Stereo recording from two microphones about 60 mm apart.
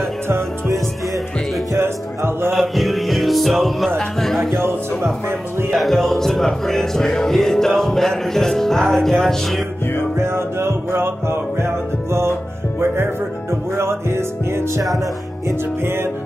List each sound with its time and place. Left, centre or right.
1.8 s music: right
2.5 s music: centre
5.7 s music: centre
10.1 s music: right